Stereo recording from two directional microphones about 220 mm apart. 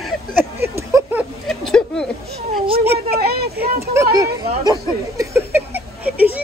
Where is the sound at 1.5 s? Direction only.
5° left (ahead or behind).